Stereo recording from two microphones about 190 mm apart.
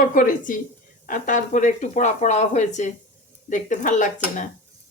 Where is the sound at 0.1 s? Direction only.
45° left (ahead or behind).